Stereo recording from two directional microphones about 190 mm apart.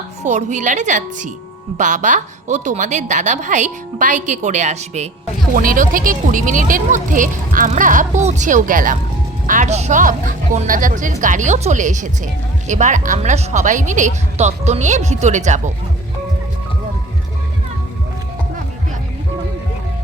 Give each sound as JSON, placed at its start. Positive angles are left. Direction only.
{"t": 0.2, "sound": "speech", "side_deg": -40}